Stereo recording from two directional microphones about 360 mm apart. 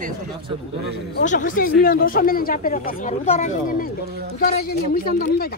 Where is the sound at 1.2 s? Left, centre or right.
Left.